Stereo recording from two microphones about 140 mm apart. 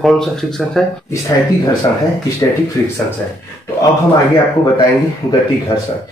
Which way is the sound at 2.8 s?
20° left (ahead or behind).